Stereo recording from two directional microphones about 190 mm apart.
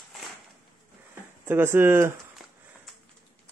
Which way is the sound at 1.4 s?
10° right (ahead or behind).